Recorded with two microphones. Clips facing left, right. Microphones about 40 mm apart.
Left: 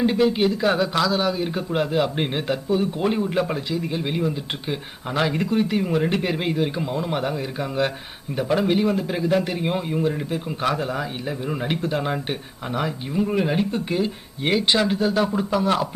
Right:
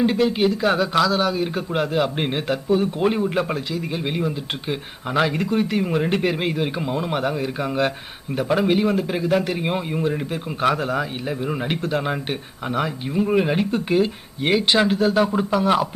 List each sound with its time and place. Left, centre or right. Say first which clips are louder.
0.0 s a man's voice: even; centre